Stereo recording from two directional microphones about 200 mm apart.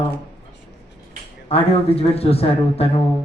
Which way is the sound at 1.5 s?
30° left (ahead or behind).